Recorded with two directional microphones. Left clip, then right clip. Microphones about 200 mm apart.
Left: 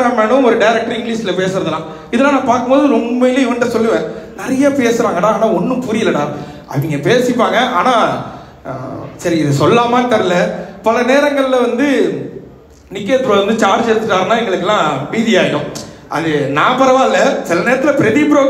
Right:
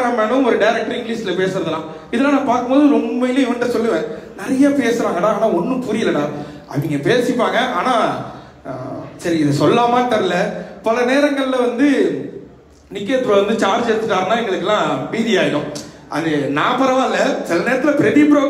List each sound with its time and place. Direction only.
0.0 s a man's voice: 40° left (ahead or behind)
9.2 s a man's voice: 40° left (ahead or behind)